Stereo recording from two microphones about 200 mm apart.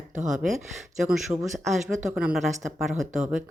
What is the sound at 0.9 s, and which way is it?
Speech, 5° right (ahead or behind).